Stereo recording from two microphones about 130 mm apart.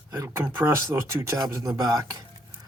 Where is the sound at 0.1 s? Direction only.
20° right (ahead or behind).